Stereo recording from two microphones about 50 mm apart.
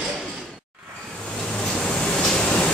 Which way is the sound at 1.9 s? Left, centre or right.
Centre.